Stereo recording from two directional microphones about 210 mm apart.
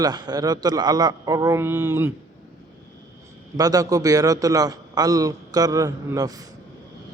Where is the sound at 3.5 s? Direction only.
15° right (ahead or behind).